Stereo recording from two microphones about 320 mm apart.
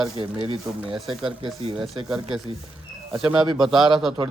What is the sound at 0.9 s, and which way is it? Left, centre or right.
Speech, centre.